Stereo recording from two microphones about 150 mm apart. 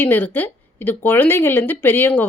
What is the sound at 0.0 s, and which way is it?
A woman's voice, 10° left (ahead or behind).